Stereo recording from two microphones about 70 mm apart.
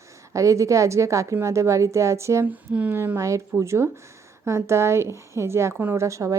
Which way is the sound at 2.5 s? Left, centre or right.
Right.